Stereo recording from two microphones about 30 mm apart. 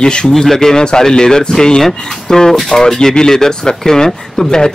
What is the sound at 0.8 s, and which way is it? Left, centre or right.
Speech, left.